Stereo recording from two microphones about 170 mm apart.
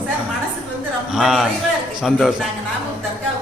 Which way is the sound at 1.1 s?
5° right (ahead or behind).